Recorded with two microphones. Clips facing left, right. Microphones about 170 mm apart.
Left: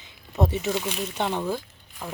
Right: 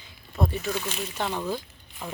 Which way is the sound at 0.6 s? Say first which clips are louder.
Left 3 dB; 20° left (ahead or behind).